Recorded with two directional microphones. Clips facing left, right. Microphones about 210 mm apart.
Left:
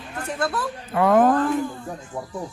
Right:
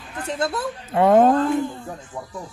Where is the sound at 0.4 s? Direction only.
25° right (ahead or behind).